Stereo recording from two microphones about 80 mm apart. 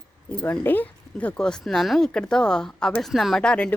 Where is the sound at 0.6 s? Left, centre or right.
Left.